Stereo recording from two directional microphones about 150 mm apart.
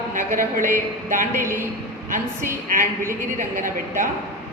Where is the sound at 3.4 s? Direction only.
60° right (ahead or behind).